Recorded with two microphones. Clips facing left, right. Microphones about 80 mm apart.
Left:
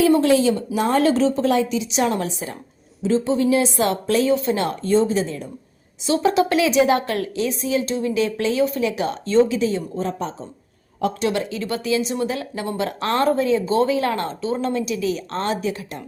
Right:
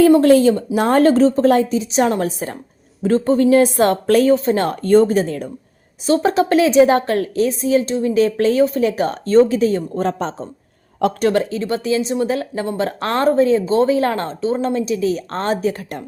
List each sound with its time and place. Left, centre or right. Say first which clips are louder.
0.0 s a woman's voice: right 5 dB; right
3.0 s a woman's voice: right 4 dB; right
6.1 s a woman's voice: right 3 dB; right
10.0 s speech: right 5 dB; right
11.2 s a woman's voice: right 6 dB; right